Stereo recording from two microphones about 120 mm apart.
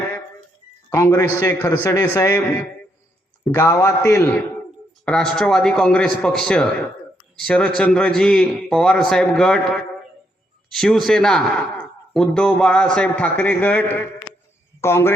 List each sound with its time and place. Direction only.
0.9 s a man's voice: 25° left (ahead or behind)
3.5 s a man's voice: 30° left (ahead or behind)
5.0 s a man's voice: 5° left (ahead or behind); by 15.1 s 20° left (ahead or behind)